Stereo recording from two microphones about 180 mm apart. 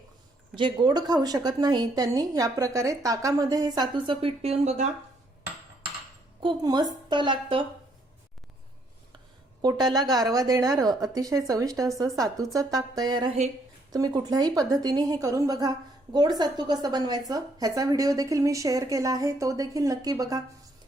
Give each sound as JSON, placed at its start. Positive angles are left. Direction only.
{"t": 0.5, "sound": "a woman's voice", "side_deg": -25}
{"t": 6.4, "sound": "a woman's voice", "side_deg": -25}
{"t": 9.6, "sound": "a woman's voice", "side_deg": -25}